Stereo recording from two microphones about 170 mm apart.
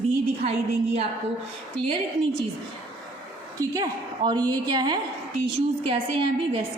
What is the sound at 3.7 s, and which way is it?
A woman's voice, 25° right (ahead or behind).